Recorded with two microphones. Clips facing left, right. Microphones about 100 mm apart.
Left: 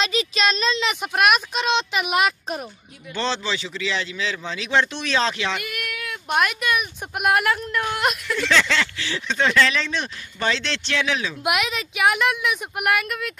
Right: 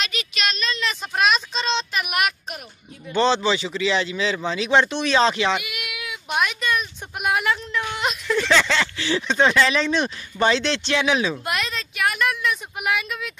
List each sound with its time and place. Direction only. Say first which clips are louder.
0.0 s speech: left 5 dB; 30° left (ahead or behind)
0.8 s speech: left 1 dB; 10° left (ahead or behind); by 2.3 s 25° left (ahead or behind)
3.2 s speech: right 6 dB; 10° right (ahead or behind)
6.4 s speech: left 1 dB; 10° left (ahead or behind)
8.5 s speech: left 1 dB; 10° right (ahead or behind)
11.4 s speech: left 4 dB; 15° left (ahead or behind)
12.8 s speech: left 2 dB; 5° left (ahead or behind)